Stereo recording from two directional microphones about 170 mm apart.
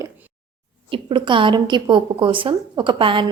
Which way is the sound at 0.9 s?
30° right (ahead or behind).